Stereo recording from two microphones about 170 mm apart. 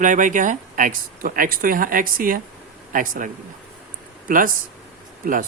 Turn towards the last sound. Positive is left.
turn(degrees=-55)  # may be behind; listen again after turning